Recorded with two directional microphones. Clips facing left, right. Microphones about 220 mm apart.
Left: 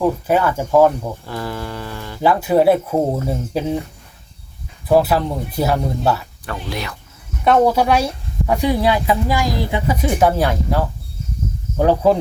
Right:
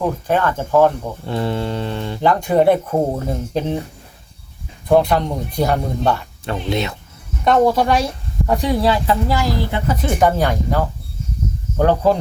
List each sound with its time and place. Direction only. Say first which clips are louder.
0.0 s speech: left 2 dB; 10° left (ahead or behind)
1.2 s mantra: right 5 dB; 25° right (ahead or behind)
2.2 s speech: left 1 dB; 5° left (ahead or behind)
4.9 s speech: even; 5° left (ahead or behind)
6.4 s mantra: right 5 dB; 25° right (ahead or behind)
7.4 s speech: even; 5° left (ahead or behind)
11.8 s speech: left 1 dB; 5° left (ahead or behind)